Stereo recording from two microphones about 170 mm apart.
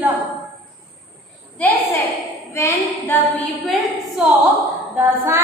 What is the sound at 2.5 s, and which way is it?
Speech, 15° left (ahead or behind).